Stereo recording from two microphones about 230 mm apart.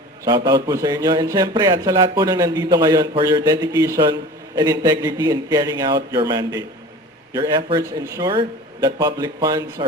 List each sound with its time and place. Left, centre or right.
0.3 s speech: centre